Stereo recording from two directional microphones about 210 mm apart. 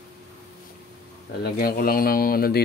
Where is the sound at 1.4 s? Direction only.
45° left (ahead or behind).